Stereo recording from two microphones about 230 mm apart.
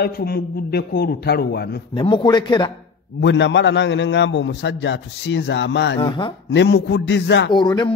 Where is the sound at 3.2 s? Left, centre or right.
Left.